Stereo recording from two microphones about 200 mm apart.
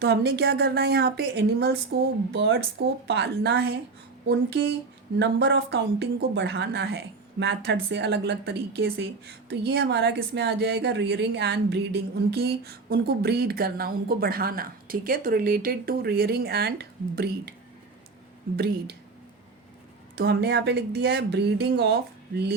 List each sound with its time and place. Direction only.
0.0 s speech: 55° right (ahead or behind)
18.5 s speech: 55° right (ahead or behind)
20.1 s speech: 55° right (ahead or behind)